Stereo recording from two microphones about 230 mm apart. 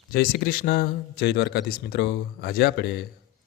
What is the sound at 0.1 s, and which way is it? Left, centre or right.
Speech, left.